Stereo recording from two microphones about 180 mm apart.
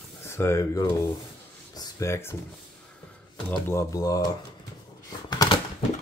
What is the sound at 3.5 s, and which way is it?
Speech, 15° left (ahead or behind).